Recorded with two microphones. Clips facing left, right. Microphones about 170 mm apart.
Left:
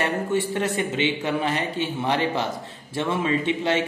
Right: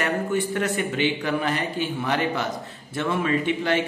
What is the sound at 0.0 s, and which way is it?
A woman's voice, 25° left (ahead or behind).